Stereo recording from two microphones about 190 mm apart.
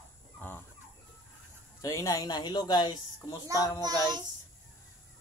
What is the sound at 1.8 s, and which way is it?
Speech, 15° left (ahead or behind).